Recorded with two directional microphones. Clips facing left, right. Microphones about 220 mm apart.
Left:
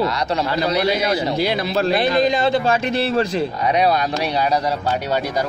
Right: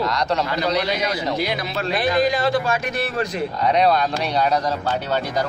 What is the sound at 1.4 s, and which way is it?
A man's voice, 30° left (ahead or behind).